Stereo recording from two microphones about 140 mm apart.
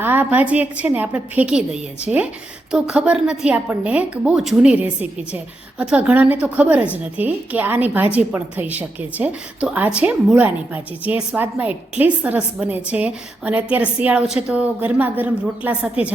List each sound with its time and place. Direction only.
0.0 s a woman's voice: 15° right (ahead or behind)